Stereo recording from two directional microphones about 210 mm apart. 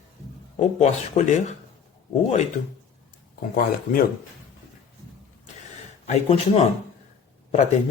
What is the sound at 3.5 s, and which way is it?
Speech, 40° left (ahead or behind).